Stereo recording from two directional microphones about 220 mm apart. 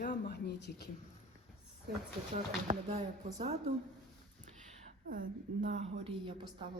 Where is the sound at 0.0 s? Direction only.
40° left (ahead or behind).